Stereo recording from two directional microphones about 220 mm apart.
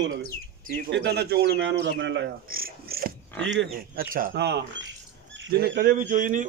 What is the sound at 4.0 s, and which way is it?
A man's voice, 40° right (ahead or behind).